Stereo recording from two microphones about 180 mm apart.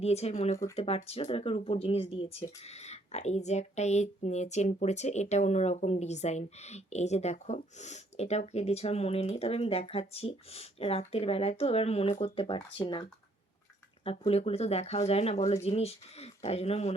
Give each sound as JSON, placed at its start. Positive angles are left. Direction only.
{"t": 0.0, "sound": "speech", "side_deg": 35}